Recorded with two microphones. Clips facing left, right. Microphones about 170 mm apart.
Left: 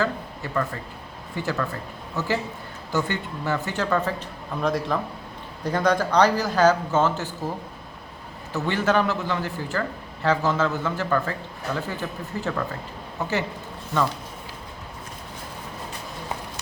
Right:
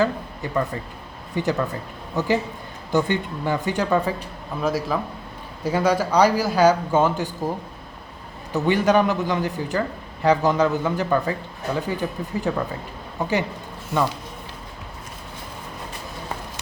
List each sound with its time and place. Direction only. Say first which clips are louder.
0.0 s a man's voice: right 4 dB; 15° right (ahead or behind)
8.5 s a man's voice: right 4 dB; 15° right (ahead or behind)